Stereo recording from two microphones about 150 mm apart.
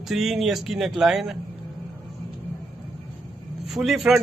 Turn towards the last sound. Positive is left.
turn(degrees=0)  # may be behind; listen again after turning